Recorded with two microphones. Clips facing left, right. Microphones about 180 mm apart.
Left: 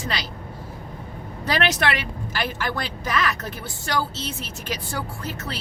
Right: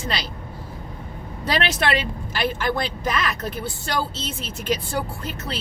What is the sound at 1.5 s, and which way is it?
A woman's voice, 20° right (ahead or behind).